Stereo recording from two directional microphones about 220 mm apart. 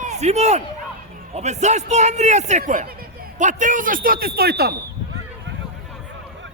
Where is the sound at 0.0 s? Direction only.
30° right (ahead or behind); by 4.8 s 45° right (ahead or behind).